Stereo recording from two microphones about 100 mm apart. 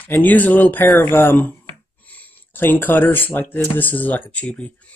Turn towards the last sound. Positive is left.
turn(degrees=15)  # may be behind; listen again after turning